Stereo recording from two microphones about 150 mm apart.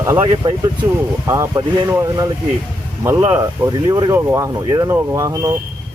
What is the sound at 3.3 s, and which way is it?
Speech, 20° right (ahead or behind).